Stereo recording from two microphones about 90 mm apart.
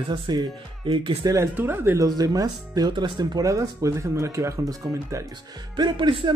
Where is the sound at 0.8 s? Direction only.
75° right (ahead or behind).